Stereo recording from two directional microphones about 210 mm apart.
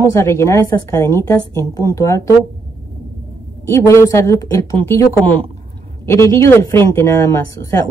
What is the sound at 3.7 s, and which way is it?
A woman's voice, 15° left (ahead or behind).